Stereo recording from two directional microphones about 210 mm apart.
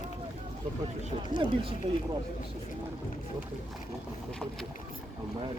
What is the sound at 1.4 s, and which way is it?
Speech, 25° right (ahead or behind).